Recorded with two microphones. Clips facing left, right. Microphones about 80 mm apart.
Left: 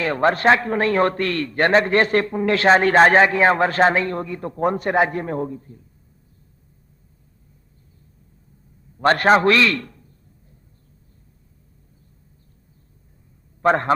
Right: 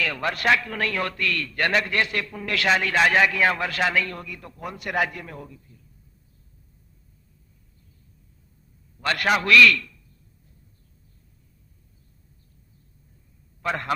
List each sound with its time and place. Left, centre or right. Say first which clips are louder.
0.0 s a man's voice: left 8 dB; left
9.0 s a man's voice: left 8 dB; left
9.8 s quack: left 8 dB; left
13.6 s a man's voice: left 10 dB; left